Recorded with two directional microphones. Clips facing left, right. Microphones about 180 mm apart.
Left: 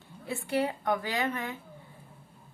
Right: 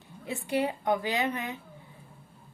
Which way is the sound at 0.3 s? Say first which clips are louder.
Right 1 dB; 15° right (ahead or behind).